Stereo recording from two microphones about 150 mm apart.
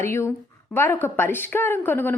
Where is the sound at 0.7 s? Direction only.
15° left (ahead or behind).